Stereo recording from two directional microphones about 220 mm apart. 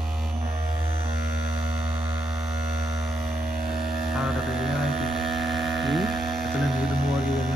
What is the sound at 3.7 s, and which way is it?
Mains hum, centre (ahead or behind).